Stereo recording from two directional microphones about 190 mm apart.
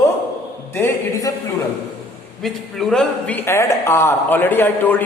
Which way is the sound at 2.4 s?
Centre (ahead or behind).